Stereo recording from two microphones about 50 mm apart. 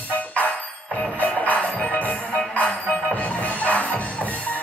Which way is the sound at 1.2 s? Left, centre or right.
Left.